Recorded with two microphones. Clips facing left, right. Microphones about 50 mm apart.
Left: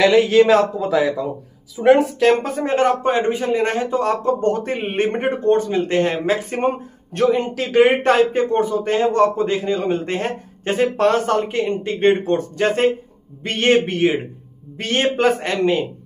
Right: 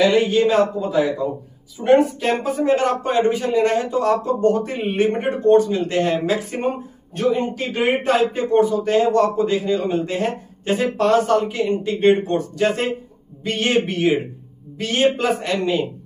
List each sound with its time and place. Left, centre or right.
0.1 s a man's voice: left
1.8 s speech: left
2.5 s speech: left
7.2 s speech: left